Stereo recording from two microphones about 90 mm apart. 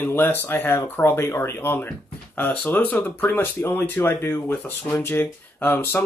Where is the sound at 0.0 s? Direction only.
20° left (ahead or behind).